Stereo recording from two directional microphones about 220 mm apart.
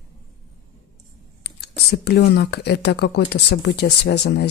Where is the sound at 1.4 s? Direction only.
45° left (ahead or behind).